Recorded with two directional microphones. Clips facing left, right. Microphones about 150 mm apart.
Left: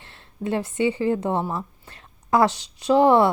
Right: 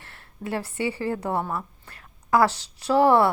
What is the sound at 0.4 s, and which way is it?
A woman's voice, 20° left (ahead or behind).